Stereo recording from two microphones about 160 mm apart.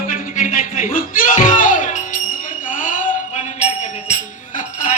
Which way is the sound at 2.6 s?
55° left (ahead or behind).